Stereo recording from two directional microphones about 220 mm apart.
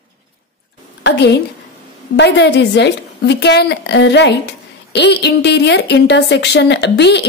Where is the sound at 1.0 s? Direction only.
50° left (ahead or behind).